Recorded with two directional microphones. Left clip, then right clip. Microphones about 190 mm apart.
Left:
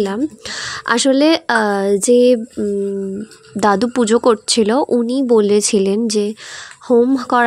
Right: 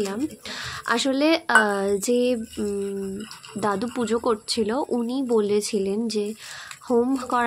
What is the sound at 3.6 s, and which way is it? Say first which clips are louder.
A woman's voice: left 11 dB; 40° left (ahead or behind).